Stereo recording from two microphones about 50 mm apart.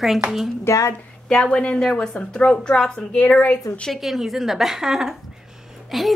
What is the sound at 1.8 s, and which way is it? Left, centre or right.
Speech, centre.